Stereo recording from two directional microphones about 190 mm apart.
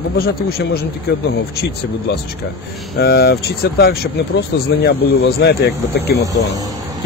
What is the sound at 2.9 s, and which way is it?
Speech, 60° left (ahead or behind).